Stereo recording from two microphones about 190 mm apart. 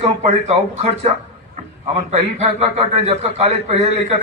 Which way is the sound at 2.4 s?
35° right (ahead or behind).